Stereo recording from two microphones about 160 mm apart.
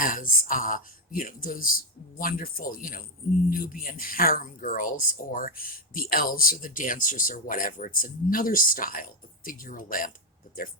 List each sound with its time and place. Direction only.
0.0 s speech: 55° left (ahead or behind)